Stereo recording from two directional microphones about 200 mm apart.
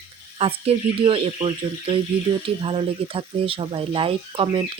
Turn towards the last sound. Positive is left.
turn(degrees=-25)  # may be behind; listen again after turning